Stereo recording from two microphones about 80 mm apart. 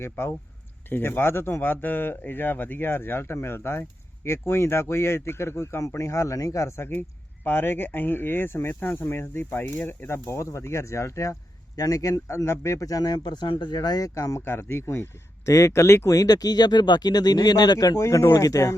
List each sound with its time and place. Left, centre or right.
0.0 s speech: left
13.7 s speech: left
14.1 s speech: left
16.1 s speech: left